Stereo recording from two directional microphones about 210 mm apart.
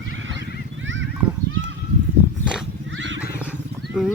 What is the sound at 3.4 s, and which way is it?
Wild animals, 5° right (ahead or behind).